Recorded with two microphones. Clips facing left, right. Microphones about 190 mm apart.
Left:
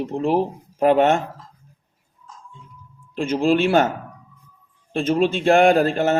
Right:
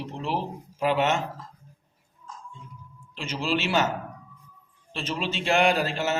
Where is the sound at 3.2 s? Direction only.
50° left (ahead or behind).